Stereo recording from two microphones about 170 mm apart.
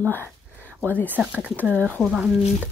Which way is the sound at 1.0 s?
10° right (ahead or behind).